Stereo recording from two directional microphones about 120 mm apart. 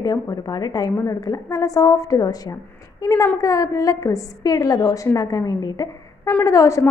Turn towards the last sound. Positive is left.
turn(degrees=25)  # may be behind; listen again after turning